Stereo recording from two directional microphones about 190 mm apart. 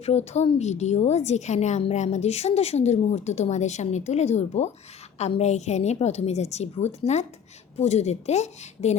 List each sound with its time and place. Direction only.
0.0 s a woman's voice: 35° left (ahead or behind)